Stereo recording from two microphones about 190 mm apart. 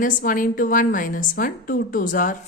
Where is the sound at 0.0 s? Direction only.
45° left (ahead or behind).